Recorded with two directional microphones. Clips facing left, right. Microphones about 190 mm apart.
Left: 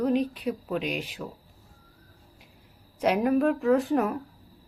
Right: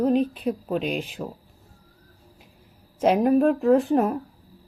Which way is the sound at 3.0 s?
40° right (ahead or behind).